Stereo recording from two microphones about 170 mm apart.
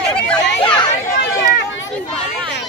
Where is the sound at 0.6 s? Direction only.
25° left (ahead or behind).